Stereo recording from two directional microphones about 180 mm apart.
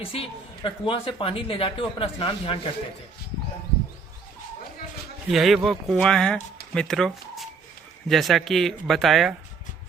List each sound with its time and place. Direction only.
0.1 s a woman's voice: 30° left (ahead or behind)
5.3 s speech: centre (ahead or behind)